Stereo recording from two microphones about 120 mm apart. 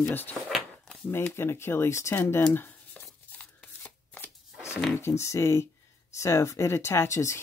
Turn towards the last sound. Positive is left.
turn(degrees=25)  # may be behind; listen again after turning